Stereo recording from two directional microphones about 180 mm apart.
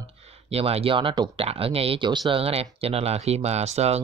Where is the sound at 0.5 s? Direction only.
35° right (ahead or behind).